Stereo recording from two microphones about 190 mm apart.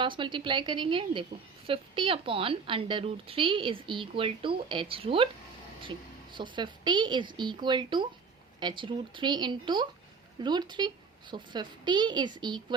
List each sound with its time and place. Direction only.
0.0 s a woman's voice: 25° right (ahead or behind)
6.3 s a woman's voice: 25° right (ahead or behind)